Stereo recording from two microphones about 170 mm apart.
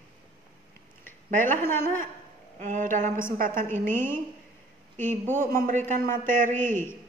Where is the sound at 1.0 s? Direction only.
50° right (ahead or behind).